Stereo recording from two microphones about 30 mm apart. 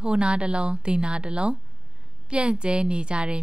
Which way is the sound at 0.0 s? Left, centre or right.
Right.